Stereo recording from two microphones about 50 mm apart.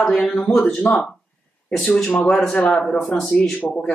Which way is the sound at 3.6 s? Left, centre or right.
Left.